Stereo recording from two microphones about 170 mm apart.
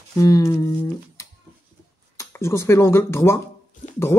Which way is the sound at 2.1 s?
15° left (ahead or behind).